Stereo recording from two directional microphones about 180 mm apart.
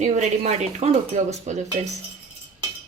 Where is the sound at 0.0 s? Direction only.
40° right (ahead or behind).